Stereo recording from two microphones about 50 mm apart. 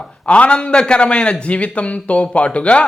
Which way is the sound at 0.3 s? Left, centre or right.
Left.